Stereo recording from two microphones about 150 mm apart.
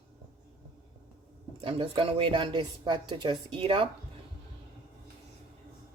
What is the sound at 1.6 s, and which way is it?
A woman's voice, 35° right (ahead or behind).